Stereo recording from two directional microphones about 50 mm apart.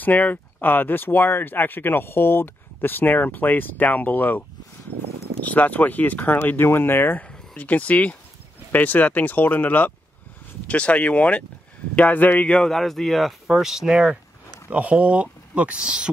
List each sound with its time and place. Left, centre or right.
0.0 s speech: left
7.5 s speech: left
10.7 s speech: left
12.5 s speech: centre
14.7 s speech: right
15.8 s speech: centre